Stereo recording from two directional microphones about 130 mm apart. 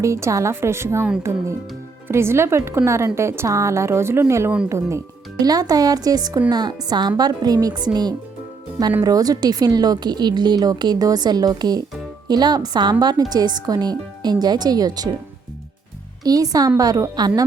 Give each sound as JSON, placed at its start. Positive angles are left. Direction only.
{"t": 0.0, "sound": "a woman's voice", "side_deg": -20}
{"t": 2.0, "sound": "a woman's voice", "side_deg": -20}
{"t": 9.0, "sound": "speech", "side_deg": -30}
{"t": 16.2, "sound": "a woman's voice", "side_deg": -30}